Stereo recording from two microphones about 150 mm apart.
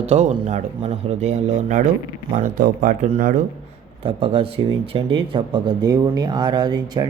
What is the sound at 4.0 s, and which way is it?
Speech, 40° right (ahead or behind).